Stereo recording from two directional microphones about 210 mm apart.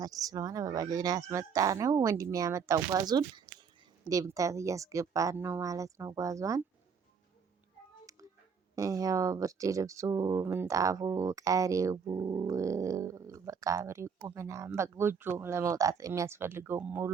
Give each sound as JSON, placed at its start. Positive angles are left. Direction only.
{"t": 0.0, "sound": "speech", "side_deg": -15}
{"t": 8.7, "sound": "speech", "side_deg": -15}